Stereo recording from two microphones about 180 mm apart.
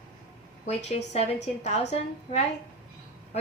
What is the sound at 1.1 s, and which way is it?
A man's voice, 35° left (ahead or behind).